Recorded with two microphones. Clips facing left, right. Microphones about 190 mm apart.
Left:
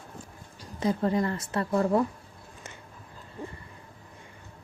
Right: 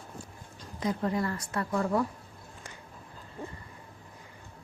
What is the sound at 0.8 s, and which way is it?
A woman's voice, 30° left (ahead or behind).